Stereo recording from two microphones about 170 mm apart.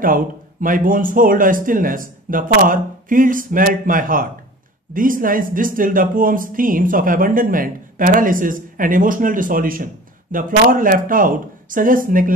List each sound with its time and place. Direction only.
0.0 s speech: 55° right (ahead or behind)